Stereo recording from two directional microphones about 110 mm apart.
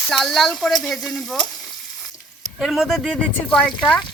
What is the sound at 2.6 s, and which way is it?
Speech, centre (ahead or behind).